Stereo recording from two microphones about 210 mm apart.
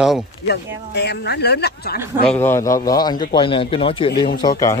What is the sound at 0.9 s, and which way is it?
A woman's voice, 50° left (ahead or behind).